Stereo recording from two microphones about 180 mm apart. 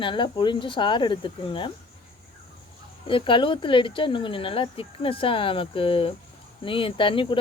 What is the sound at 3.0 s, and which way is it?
Speech, 30° left (ahead or behind).